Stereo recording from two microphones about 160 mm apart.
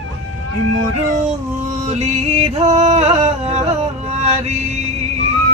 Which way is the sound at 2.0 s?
40° right (ahead or behind).